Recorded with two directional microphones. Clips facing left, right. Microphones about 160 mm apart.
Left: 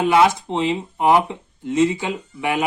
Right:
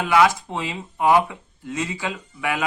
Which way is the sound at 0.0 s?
25° left (ahead or behind).